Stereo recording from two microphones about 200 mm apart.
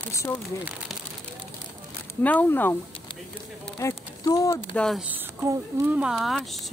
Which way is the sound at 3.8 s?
15° left (ahead or behind).